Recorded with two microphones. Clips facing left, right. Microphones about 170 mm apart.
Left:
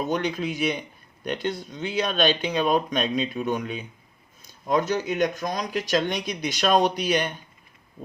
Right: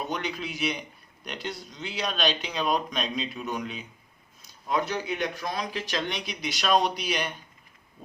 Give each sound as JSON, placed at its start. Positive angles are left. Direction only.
{"t": 0.0, "sound": "a man's voice", "side_deg": 45}